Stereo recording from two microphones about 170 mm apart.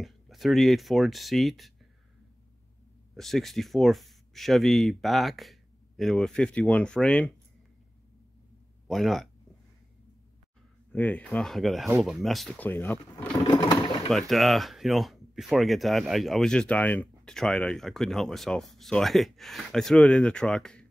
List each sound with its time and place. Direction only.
0.0 s speech: centre (ahead or behind)
3.2 s speech: centre (ahead or behind)
8.8 s speech: centre (ahead or behind)
10.9 s speech: 10° left (ahead or behind)
13.4 s sewing machine: 25° left (ahead or behind)
14.0 s speech: centre (ahead or behind)